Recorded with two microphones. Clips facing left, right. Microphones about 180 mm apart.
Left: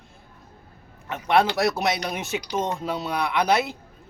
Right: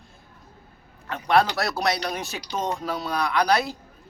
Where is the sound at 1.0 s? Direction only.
20° left (ahead or behind).